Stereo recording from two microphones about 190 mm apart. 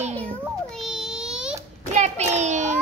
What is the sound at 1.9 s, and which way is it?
Child singing, 35° right (ahead or behind).